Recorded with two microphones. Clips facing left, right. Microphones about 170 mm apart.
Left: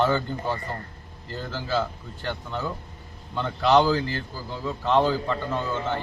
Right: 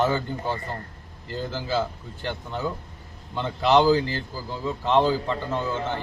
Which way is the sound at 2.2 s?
15° right (ahead or behind).